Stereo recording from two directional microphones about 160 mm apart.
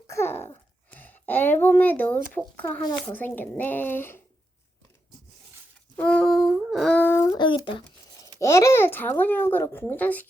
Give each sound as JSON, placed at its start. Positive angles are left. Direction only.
{"t": 0.1, "sound": "a child's voice", "side_deg": 15}
{"t": 6.0, "sound": "speech", "side_deg": 10}
{"t": 7.3, "sound": "speech", "side_deg": 30}
{"t": 8.4, "sound": "speech", "side_deg": 20}